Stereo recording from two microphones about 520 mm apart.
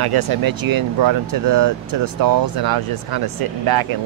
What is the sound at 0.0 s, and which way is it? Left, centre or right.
Speech, right.